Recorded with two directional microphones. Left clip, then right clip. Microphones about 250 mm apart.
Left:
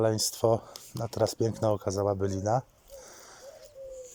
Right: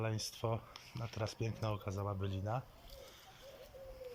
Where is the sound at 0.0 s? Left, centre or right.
Left.